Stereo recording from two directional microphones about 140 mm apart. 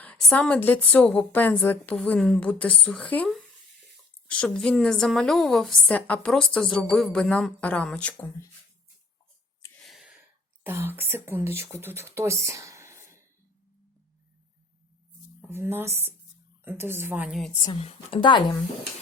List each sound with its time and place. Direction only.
0.0 s a woman's voice: 10° left (ahead or behind)
9.7 s a sound: centre (ahead or behind)
10.6 s speech: 15° right (ahead or behind)
15.4 s speech: 15° right (ahead or behind)
17.6 s a woman's voice: 40° left (ahead or behind)